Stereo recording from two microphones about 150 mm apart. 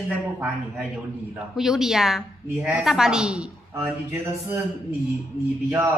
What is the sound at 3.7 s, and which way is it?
Speech, 20° right (ahead or behind).